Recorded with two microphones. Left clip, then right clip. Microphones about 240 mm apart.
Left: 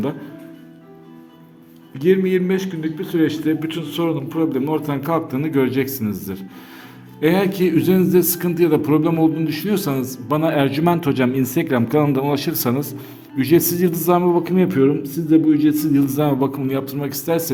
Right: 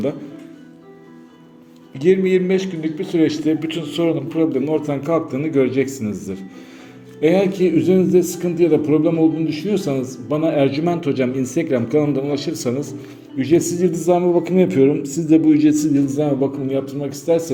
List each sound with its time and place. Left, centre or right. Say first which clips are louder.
2.0 s a man's voice: right 1 dB; centre